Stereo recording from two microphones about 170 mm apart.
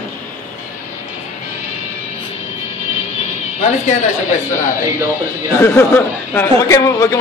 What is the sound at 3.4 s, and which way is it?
Speech, 40° left (ahead or behind).